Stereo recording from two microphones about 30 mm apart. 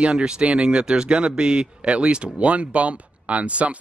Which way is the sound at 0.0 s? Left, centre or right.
Right.